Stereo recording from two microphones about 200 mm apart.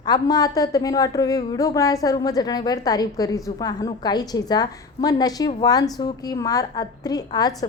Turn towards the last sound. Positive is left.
turn(degrees=20)  # may be behind; listen again after turning